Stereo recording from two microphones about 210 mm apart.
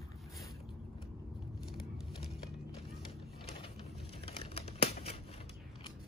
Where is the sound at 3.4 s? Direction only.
25° left (ahead or behind).